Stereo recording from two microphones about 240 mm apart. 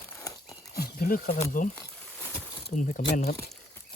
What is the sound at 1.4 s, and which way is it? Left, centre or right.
Speech, left.